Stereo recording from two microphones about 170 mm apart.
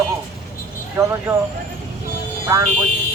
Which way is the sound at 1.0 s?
15° right (ahead or behind).